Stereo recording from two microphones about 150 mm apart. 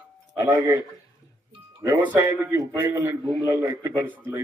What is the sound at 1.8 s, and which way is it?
A man's voice, 20° right (ahead or behind).